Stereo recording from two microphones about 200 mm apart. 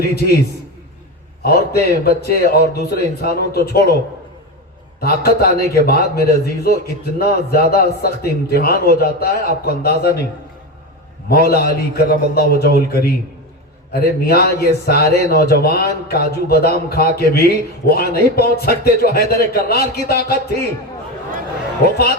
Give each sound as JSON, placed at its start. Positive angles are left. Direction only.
{"t": 0.0, "sound": "a man's voice", "side_deg": 50}
{"t": 4.9, "sound": "a man's voice", "side_deg": 50}
{"t": 11.3, "sound": "a man's voice", "side_deg": 50}
{"t": 21.8, "sound": "a man's voice", "side_deg": 50}